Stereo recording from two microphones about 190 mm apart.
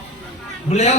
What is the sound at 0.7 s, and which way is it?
Speech, 35° left (ahead or behind).